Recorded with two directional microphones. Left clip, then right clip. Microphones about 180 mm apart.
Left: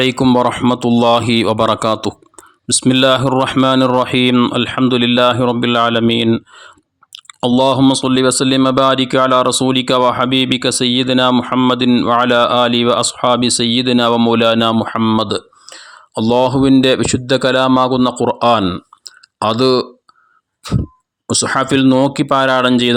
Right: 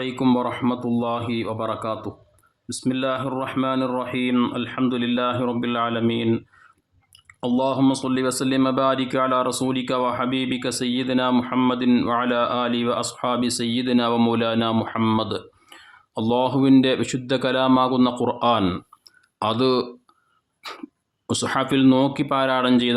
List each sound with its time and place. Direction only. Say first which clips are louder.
0.0 s speech: left 10 dB; 45° left (ahead or behind)
19.0 s clicking: left 8 dB; 35° left (ahead or behind)
20.6 s a sound: left 11 dB; 15° left (ahead or behind)
21.2 s speech: left 8 dB; 30° left (ahead or behind)